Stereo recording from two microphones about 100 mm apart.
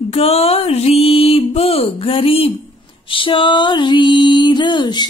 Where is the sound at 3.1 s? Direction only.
60° left (ahead or behind).